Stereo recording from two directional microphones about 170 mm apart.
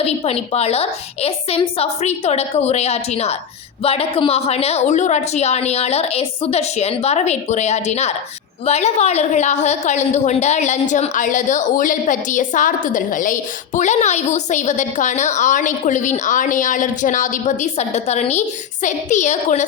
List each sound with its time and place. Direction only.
0.0 s a woman's voice: 35° left (ahead or behind)